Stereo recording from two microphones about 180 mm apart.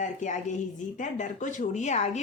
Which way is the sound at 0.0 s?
40° left (ahead or behind).